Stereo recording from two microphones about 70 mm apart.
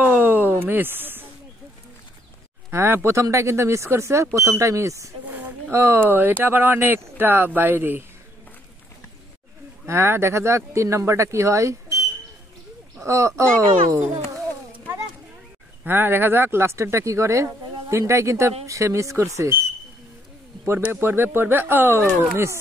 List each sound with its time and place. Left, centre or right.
0.0 s a sound: right
2.7 s speech: right
5.2 s a sound: right
5.7 s speech: right
6.0 s speech: right
9.8 s speech: right
15.8 s speech: right
20.8 s speech: right